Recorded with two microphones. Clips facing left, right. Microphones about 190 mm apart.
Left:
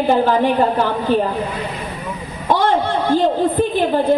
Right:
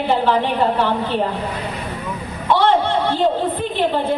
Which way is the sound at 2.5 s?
45° left (ahead or behind).